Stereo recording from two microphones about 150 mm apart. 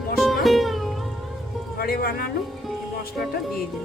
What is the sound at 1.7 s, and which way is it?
Music, 90° left.